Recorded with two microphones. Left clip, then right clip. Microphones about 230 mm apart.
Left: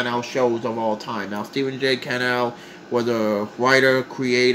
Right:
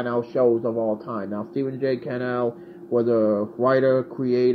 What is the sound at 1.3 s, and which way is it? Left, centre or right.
Speech, centre.